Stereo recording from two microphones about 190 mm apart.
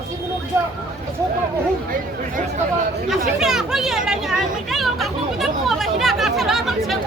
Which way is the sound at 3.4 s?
Centre (ahead or behind).